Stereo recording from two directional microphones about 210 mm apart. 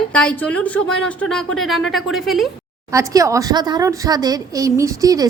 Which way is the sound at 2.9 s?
15° right (ahead or behind).